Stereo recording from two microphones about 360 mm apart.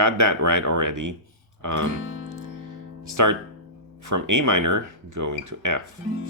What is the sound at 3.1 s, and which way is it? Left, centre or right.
Speech, right.